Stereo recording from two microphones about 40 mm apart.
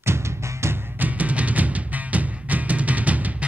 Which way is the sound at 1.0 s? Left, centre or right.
Right.